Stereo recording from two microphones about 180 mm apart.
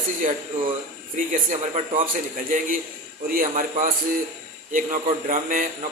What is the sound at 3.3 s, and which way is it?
A man's voice, 50° right (ahead or behind).